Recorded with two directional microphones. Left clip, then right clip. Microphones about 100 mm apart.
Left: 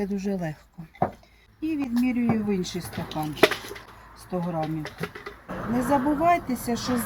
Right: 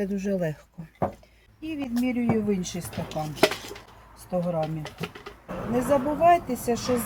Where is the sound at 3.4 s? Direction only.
5° left (ahead or behind).